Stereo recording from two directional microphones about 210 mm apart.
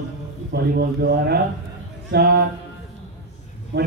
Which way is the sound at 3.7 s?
55° right (ahead or behind).